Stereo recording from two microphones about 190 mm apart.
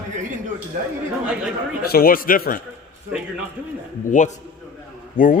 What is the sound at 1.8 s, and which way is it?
Speech, 50° left (ahead or behind).